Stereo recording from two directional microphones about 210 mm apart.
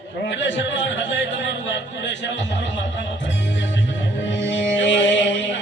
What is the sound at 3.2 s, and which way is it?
Music, 60° left (ahead or behind).